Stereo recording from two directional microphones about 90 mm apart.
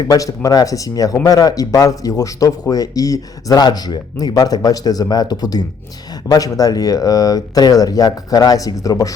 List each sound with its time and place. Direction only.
0.0 s speech: 40° left (ahead or behind)